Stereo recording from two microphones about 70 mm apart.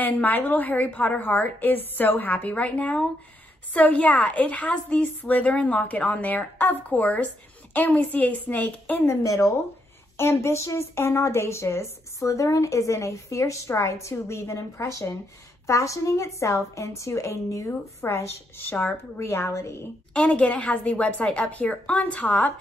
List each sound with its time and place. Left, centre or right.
0.0 s a woman's voice: left
9.0 s a woman's voice: left
18.0 s a woman's voice: left
20.2 s a woman's voice: centre